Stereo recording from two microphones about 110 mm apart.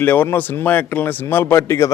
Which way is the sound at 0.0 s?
15° left (ahead or behind).